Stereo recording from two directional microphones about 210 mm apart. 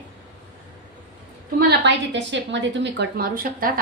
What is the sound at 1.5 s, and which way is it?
A woman's voice, 55° right (ahead or behind).